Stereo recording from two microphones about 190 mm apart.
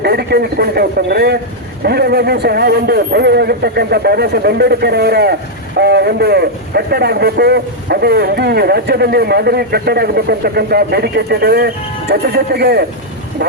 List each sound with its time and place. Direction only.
0.0 s a man's voice: 55° right (ahead or behind)